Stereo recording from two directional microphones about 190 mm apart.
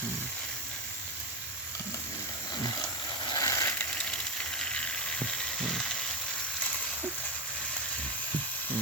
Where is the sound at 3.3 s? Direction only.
15° left (ahead or behind).